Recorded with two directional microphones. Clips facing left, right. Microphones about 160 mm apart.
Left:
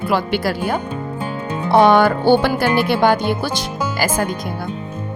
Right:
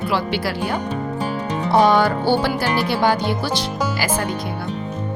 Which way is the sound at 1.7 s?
60° left (ahead or behind).